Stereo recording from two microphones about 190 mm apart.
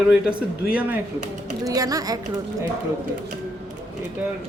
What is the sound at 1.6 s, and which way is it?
Speech, 20° right (ahead or behind).